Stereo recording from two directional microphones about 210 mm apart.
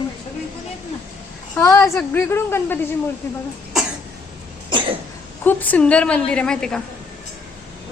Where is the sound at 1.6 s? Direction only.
15° left (ahead or behind).